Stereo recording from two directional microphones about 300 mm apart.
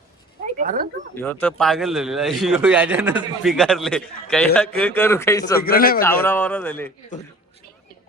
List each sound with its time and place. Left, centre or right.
0.6 s speech: right
1.1 s a man's voice: centre
5.5 s a man's voice: left
6.0 s speech: centre